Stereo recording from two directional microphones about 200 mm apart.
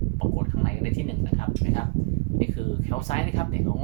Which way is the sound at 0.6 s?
35° left (ahead or behind).